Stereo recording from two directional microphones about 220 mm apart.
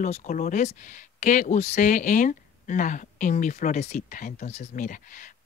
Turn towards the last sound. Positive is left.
turn(degrees=35)  # may be behind; listen again after turning